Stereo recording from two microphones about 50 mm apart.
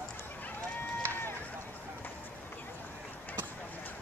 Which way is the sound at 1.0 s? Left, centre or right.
Right.